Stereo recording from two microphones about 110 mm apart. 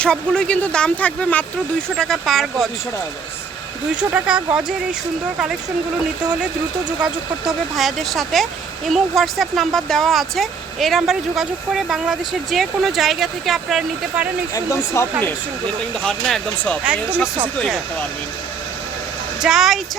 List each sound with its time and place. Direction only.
0.0 s speech: 10° left (ahead or behind)
2.0 s speech: centre (ahead or behind)
4.1 s speech: 10° right (ahead or behind)
7.0 s speech: centre (ahead or behind)
14.5 s speech: 25° left (ahead or behind)
16.0 s speech: 5° left (ahead or behind)
16.8 s speech: 15° right (ahead or behind)
19.4 s speech: 5° right (ahead or behind)